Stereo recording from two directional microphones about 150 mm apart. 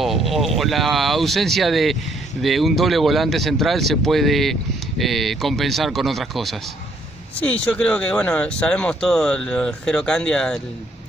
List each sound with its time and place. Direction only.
0.0 s speech: centre (ahead or behind)